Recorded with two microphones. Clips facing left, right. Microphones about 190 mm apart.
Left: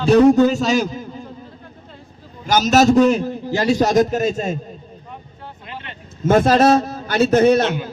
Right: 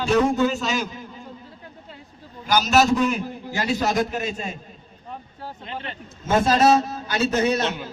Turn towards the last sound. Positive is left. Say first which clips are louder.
# left 8 dB
turn(degrees=50)  # may be behind; listen again after turning